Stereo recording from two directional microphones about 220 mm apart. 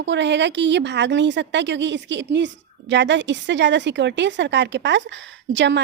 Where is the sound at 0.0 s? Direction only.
55° right (ahead or behind).